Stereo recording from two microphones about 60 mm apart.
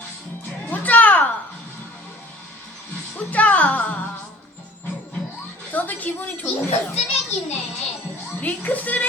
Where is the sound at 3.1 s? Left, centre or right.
Left.